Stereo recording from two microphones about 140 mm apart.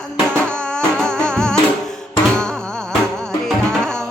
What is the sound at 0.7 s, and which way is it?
Music, 5° left (ahead or behind).